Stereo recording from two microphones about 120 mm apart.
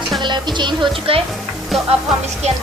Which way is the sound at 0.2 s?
40° right (ahead or behind).